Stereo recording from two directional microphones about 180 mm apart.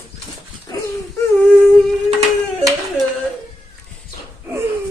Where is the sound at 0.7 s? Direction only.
20° left (ahead or behind).